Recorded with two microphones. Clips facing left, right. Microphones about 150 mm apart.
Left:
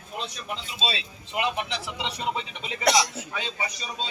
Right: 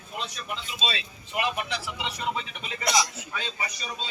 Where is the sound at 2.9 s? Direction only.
75° left (ahead or behind).